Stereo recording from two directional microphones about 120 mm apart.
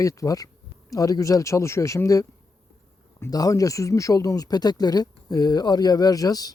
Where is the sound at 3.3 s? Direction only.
30° left (ahead or behind).